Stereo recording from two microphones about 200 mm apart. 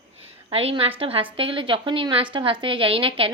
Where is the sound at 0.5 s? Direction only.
30° right (ahead or behind).